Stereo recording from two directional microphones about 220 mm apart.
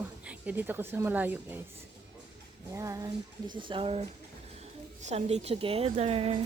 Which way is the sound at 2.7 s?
15° right (ahead or behind).